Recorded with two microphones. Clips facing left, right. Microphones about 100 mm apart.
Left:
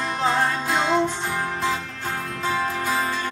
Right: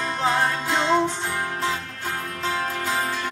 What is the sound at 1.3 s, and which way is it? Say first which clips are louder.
Music: left 1 dB; centre (ahead or behind).